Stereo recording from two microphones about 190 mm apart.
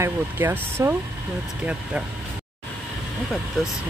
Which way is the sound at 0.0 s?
15° right (ahead or behind).